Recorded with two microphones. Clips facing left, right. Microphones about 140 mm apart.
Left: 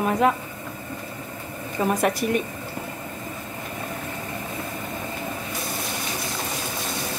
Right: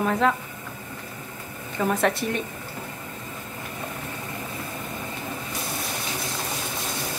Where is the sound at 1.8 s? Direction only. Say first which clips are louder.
Left 1 dB; 15° left (ahead or behind).